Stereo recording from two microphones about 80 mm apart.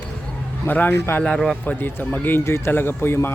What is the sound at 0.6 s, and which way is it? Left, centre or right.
Speech, left.